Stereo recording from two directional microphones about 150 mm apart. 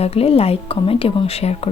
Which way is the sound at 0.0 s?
40° left (ahead or behind).